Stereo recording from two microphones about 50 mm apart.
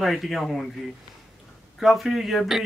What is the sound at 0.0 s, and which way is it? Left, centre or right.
Speech, centre.